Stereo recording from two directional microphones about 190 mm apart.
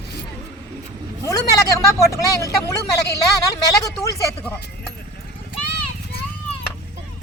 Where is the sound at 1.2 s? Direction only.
20° left (ahead or behind).